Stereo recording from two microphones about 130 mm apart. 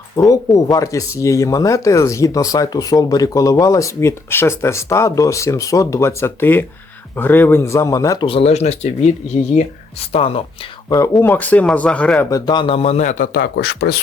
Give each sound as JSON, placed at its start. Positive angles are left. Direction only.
{"t": 0.2, "sound": "speech", "side_deg": 25}
{"t": 8.2, "sound": "speech", "side_deg": 45}
{"t": 10.1, "sound": "speech", "side_deg": 50}
{"t": 10.8, "sound": "speech", "side_deg": 25}
{"t": 12.3, "sound": "a man's voice", "side_deg": 35}